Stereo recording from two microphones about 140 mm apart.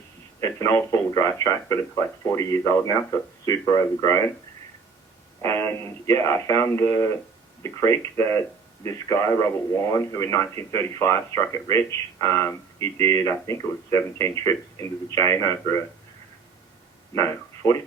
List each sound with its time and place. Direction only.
0.3 s a man's voice: 20° left (ahead or behind)
5.4 s a man's voice: 20° left (ahead or behind)
17.2 s speech: 20° left (ahead or behind)